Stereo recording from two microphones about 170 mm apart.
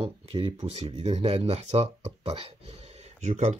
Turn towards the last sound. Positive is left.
turn(degrees=-40)  # may be behind; listen again after turning